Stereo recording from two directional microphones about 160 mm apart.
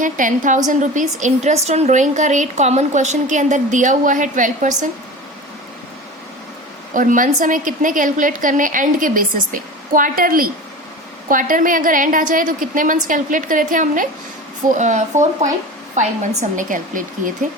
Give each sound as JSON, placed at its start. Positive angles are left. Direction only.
{"t": 0.0, "sound": "a woman's voice", "side_deg": -55}
{"t": 6.9, "sound": "a woman's voice", "side_deg": -55}